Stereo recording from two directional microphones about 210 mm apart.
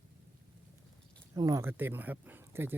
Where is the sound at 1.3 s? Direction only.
15° right (ahead or behind).